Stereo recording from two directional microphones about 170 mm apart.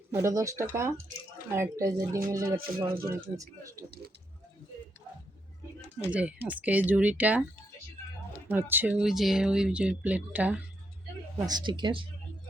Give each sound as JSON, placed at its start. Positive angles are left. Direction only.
{"t": 0.1, "sound": "speech", "side_deg": -15}
{"t": 6.1, "sound": "speech", "side_deg": -10}
{"t": 8.4, "sound": "speech", "side_deg": -10}
{"t": 11.4, "sound": "speech", "side_deg": -25}